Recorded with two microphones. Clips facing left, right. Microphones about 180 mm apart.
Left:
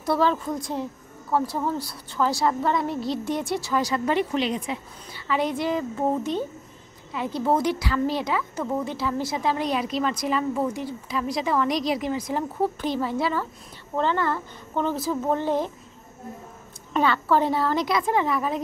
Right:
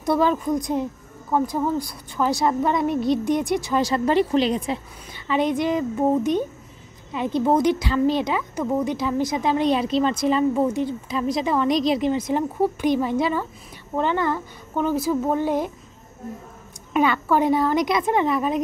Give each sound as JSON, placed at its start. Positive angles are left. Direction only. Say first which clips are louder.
{"t": 0.0, "sound": "a woman's voice", "louder": "right 3 dB", "side_deg": -15}
{"t": 5.1, "sound": "a woman's voice", "louder": "right 4 dB", "side_deg": -20}
{"t": 16.9, "sound": "speech", "louder": "right 2 dB", "side_deg": -15}